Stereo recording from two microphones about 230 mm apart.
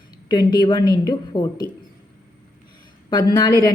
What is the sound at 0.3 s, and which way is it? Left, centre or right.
A woman's voice, centre.